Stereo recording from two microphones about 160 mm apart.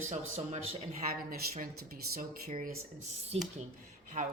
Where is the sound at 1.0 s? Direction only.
65° right (ahead or behind).